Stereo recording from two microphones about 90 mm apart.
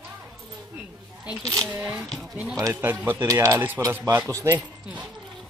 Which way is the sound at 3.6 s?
25° right (ahead or behind).